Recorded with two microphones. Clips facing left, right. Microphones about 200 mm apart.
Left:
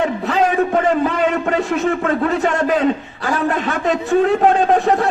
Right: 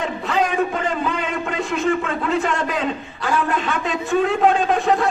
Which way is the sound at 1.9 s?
40° left (ahead or behind).